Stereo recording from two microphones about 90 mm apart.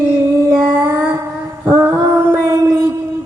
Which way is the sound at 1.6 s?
25° right (ahead or behind).